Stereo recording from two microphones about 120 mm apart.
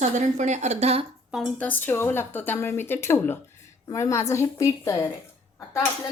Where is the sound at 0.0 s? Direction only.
80° right; by 1.0 s 60° right (ahead or behind).